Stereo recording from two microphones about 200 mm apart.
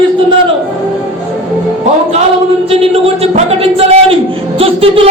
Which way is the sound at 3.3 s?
30° right (ahead or behind).